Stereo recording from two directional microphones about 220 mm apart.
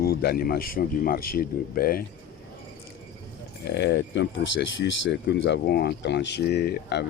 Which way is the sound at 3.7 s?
50° left (ahead or behind).